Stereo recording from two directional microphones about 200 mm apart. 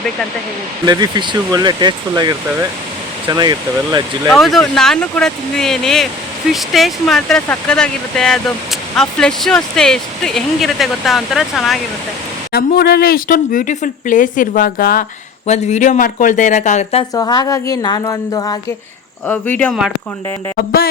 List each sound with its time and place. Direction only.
0.9 s speech: 20° right (ahead or behind)
4.3 s speech: centre (ahead or behind)
12.5 s speech: 50° left (ahead or behind)
15.4 s speech: 35° left (ahead or behind)
17.2 s speech: 20° left (ahead or behind)
19.3 s speech: 5° left (ahead or behind)
20.6 s speech: 50° left (ahead or behind)